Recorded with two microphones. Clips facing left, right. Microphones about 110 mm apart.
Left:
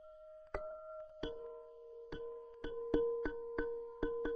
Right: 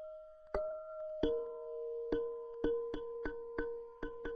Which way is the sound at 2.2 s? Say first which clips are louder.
Right 9 dB; 25° right (ahead or behind).